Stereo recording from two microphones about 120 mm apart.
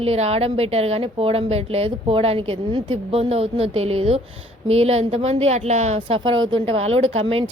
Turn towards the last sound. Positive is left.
turn(degrees=-55)  # may be behind; listen again after turning